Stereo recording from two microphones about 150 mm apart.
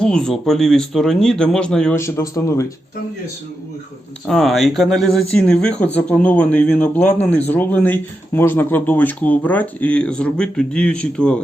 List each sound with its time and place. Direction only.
0.0 s speech: 5° left (ahead or behind)
2.0 s a man's voice: 20° left (ahead or behind)
4.3 s speech: centre (ahead or behind)